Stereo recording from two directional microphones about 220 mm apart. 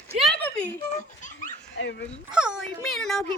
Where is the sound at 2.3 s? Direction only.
5° right (ahead or behind).